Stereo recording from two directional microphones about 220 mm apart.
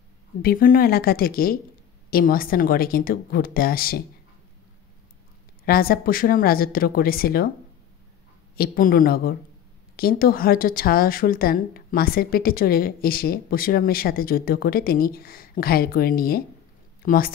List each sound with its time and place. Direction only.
0.4 s speech: 40° left (ahead or behind)
5.7 s speech: 45° left (ahead or behind)
8.5 s a woman's voice: 40° left (ahead or behind)